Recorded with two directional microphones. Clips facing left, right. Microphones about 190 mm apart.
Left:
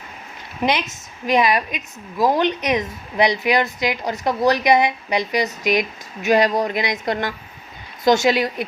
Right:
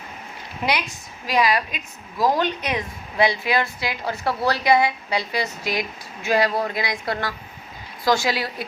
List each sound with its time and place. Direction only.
0.6 s a woman's voice: 20° left (ahead or behind)